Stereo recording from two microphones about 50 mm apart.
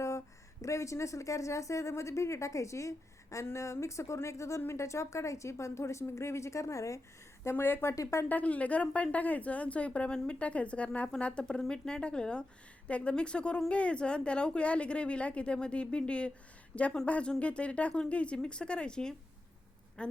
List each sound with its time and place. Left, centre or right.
0.6 s a woman's voice: left
3.4 s a woman's voice: left
7.5 s speech: left
8.3 s a woman's voice: left